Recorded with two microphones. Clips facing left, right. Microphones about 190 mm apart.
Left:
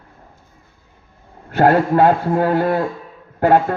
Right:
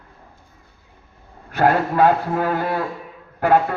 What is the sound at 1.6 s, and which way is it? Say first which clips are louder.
A man's voice: left 3 dB; 30° left (ahead or behind).